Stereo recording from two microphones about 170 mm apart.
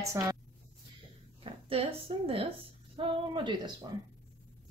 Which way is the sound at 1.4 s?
35° right (ahead or behind).